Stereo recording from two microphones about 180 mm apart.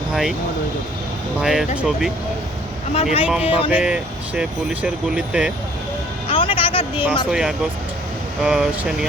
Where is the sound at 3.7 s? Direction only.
5° right (ahead or behind).